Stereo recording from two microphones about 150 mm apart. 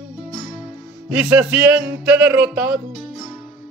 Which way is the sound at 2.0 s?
15° right (ahead or behind).